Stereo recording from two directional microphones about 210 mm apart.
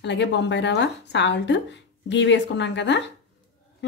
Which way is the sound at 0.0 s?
55° left (ahead or behind).